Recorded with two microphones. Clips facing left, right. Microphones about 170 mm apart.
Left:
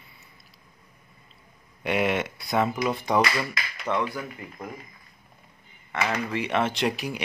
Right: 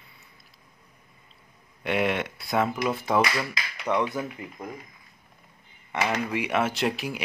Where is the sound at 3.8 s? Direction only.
20° right (ahead or behind).